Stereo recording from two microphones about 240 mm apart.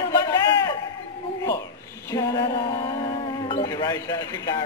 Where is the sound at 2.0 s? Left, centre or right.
Centre.